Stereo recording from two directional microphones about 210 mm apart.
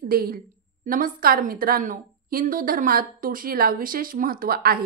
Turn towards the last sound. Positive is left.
turn(degrees=-45)  # may be behind; listen again after turning